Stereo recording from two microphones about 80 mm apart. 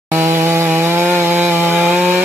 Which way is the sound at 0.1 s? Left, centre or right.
Right.